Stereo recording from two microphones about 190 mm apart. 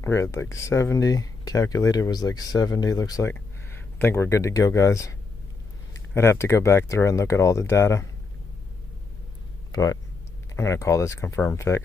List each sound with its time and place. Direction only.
0.0 s speech: 15° left (ahead or behind)
6.1 s speech: 15° left (ahead or behind)
9.7 s a sound: 15° left (ahead or behind)
10.5 s speech: 15° left (ahead or behind)